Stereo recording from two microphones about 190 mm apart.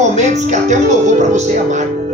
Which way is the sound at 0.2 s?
40° right (ahead or behind).